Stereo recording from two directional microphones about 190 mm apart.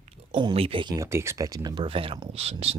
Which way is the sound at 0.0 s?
35° right (ahead or behind).